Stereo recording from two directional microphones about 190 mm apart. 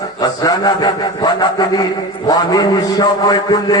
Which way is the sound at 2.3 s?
20° left (ahead or behind).